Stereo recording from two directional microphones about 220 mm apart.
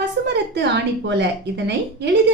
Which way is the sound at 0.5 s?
50° right (ahead or behind).